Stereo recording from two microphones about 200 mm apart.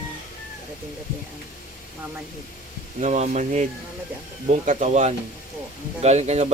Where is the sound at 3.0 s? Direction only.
35° right (ahead or behind).